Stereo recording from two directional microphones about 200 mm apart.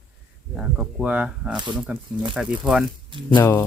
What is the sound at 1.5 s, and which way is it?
Speech, 20° right (ahead or behind).